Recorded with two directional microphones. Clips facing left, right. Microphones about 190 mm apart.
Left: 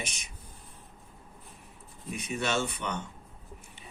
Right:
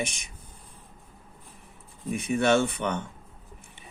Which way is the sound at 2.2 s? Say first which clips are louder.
Right 8 dB; 55° right (ahead or behind).